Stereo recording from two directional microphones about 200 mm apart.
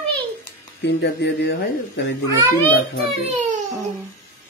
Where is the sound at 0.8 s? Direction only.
60° left (ahead or behind).